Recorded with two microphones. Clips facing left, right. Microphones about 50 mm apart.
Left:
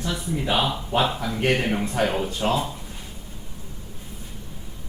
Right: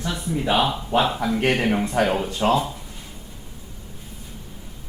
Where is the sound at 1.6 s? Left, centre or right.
Right.